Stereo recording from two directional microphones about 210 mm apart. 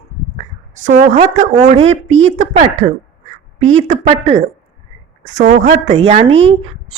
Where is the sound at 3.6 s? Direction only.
65° right (ahead or behind).